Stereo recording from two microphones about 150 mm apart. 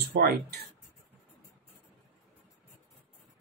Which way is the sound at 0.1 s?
90° right.